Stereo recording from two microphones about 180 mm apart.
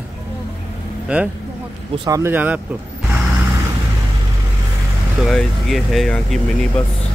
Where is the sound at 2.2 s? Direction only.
10° right (ahead or behind).